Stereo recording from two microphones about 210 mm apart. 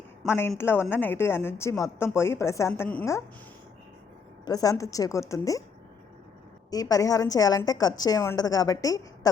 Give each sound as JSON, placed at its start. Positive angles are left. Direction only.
{"t": 0.3, "sound": "a woman's voice", "side_deg": 10}
{"t": 4.4, "sound": "a woman's voice", "side_deg": 15}
{"t": 6.7, "sound": "a woman's voice", "side_deg": 15}